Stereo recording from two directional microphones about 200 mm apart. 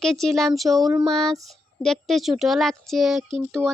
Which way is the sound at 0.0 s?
Centre (ahead or behind).